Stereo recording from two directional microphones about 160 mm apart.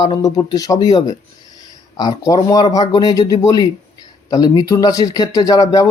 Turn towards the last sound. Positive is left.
turn(degrees=20)  # may be behind; listen again after turning